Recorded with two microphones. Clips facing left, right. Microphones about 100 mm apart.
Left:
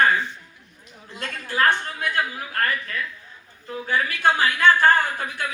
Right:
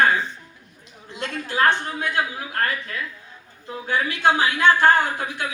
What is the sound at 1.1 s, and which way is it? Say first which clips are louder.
A woman's voice: right 3 dB; 20° right (ahead or behind).